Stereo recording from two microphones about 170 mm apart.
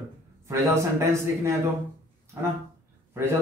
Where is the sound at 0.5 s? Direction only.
15° right (ahead or behind).